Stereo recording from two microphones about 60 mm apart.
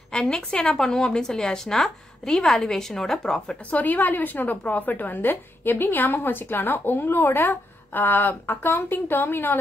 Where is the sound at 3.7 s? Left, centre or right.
Left.